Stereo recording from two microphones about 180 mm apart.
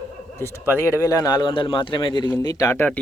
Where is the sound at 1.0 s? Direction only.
20° left (ahead or behind).